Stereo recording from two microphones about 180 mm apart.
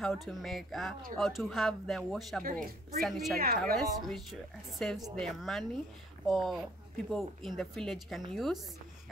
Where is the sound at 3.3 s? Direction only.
55° right (ahead or behind).